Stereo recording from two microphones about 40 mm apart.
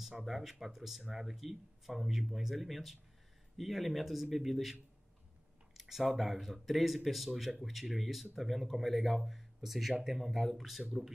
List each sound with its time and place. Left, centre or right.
0.2 s speech: centre
5.8 s speech: centre